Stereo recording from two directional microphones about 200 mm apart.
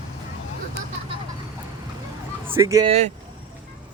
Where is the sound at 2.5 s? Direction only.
15° right (ahead or behind).